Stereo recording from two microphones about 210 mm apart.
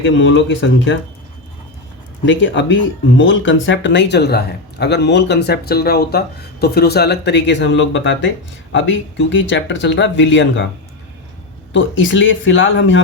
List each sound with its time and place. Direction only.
0.0 s speech: 60° left (ahead or behind)
2.2 s speech: 60° left (ahead or behind)
11.7 s speech: 60° left (ahead or behind)